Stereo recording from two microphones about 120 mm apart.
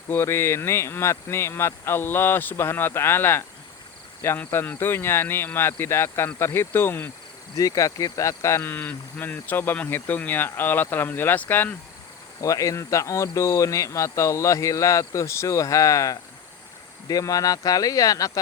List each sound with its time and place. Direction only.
0.1 s speech: 20° left (ahead or behind)
12.4 s speech: 30° left (ahead or behind)